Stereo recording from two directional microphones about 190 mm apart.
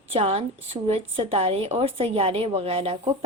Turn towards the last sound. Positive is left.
turn(degrees=-30)  # may be behind; listen again after turning